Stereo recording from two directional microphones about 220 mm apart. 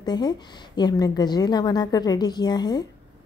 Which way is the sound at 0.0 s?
20° left (ahead or behind).